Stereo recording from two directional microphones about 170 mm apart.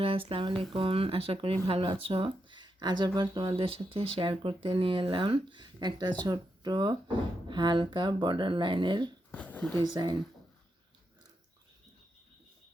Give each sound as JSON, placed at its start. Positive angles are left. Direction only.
{"t": 0.0, "sound": "speech", "side_deg": -35}
{"t": 9.3, "sound": "a sound", "side_deg": 10}
{"t": 9.9, "sound": "speech", "side_deg": -25}